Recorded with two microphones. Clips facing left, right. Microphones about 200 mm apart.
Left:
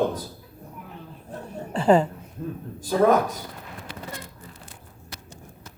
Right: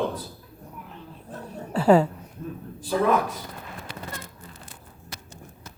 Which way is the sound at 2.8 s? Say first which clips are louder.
Left 3 dB; 40° left (ahead or behind).